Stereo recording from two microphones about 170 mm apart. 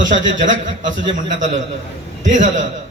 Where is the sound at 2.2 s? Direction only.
45° right (ahead or behind).